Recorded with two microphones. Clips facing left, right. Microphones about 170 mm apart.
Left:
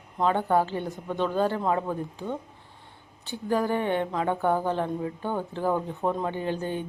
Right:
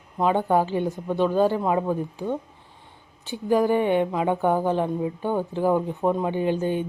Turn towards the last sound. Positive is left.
turn(degrees=-15)  # may be behind; listen again after turning